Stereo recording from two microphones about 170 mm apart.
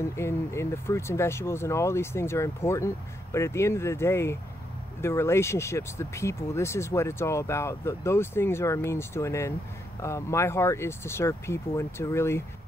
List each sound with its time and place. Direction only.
0.0 s speech: 15° left (ahead or behind)